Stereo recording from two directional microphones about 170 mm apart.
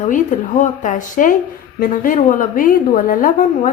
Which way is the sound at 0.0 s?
50° left (ahead or behind).